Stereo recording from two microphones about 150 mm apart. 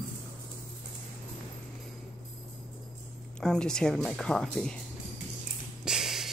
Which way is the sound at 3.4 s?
5° left (ahead or behind).